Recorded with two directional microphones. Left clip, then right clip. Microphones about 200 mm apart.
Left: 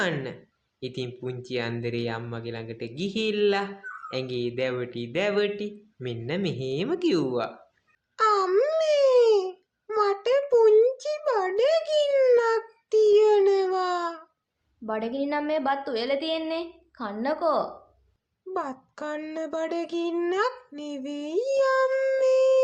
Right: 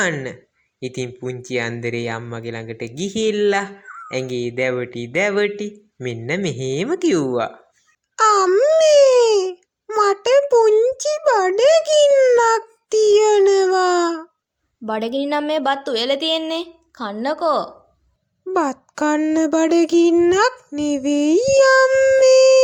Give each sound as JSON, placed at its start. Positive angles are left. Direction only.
{"t": 0.0, "sound": "speech", "side_deg": -35}